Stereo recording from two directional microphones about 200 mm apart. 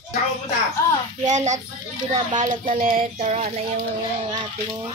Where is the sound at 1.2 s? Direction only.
35° right (ahead or behind).